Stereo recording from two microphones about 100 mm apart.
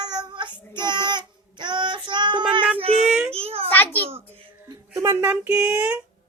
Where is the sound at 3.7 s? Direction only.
20° left (ahead or behind).